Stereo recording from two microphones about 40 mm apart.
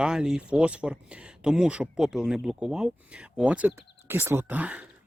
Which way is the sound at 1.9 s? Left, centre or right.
Centre.